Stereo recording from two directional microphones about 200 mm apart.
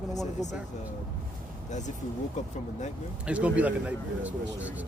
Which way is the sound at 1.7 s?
35° left (ahead or behind).